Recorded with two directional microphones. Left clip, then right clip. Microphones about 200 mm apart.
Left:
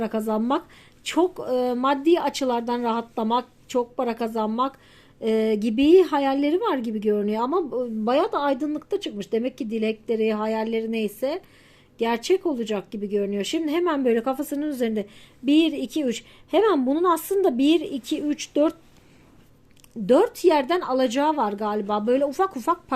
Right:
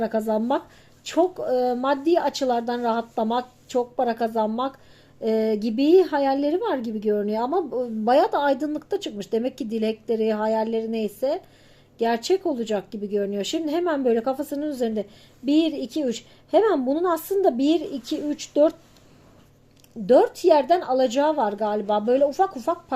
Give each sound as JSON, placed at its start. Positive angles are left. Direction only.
{"t": 0.0, "sound": "speech", "side_deg": 15}
{"t": 20.1, "sound": "speech", "side_deg": 20}